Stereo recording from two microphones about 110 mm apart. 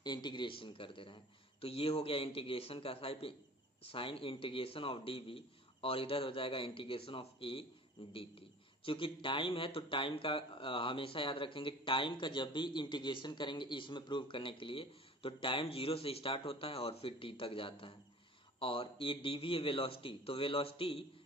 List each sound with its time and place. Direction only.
0.0 s a man's voice: 40° left (ahead or behind); by 21.0 s 55° left (ahead or behind)